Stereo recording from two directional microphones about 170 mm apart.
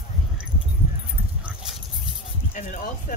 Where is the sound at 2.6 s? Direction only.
50° left (ahead or behind).